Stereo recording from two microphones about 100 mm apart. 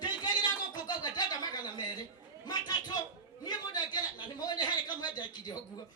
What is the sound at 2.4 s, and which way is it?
A man's voice, 45° left (ahead or behind).